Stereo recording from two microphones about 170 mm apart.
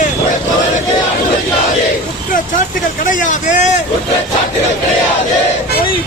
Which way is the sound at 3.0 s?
50° left (ahead or behind).